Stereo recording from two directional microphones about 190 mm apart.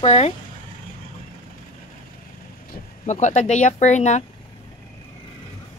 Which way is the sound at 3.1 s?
40° left (ahead or behind).